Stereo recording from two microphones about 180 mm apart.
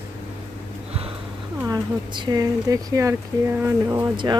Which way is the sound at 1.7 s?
25° right (ahead or behind).